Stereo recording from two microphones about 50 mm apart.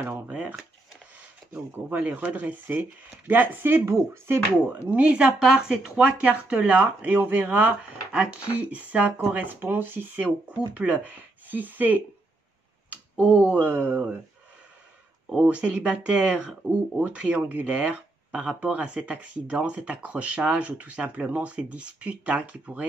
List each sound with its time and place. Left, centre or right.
0.1 s speech: right
1.5 s speech: right
3.8 s speech: right
4.8 s speech: right
5.4 s speech: centre; by 7.4 s right
8.1 s speech: right
10.2 s speech: right
12.9 s a sound: right
13.6 s speech: right
15.4 s speech: right